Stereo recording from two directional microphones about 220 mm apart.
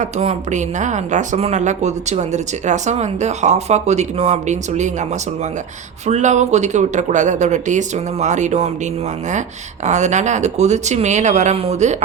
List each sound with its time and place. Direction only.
0.0 s speech: 30° right (ahead or behind)
6.1 s speech: 30° right (ahead or behind)
9.8 s speech: 30° right (ahead or behind)